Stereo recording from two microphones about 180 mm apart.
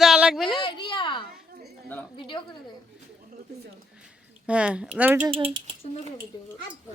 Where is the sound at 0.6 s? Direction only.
25° left (ahead or behind).